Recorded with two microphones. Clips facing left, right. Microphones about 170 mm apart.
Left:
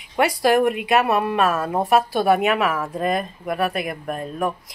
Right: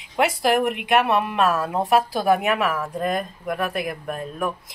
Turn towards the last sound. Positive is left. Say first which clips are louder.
# left 2 dB
turn(degrees=0)  # may be behind; listen again after turning